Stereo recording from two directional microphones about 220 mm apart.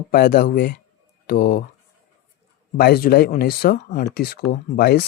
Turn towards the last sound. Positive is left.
turn(degrees=45)  # may be behind; listen again after turning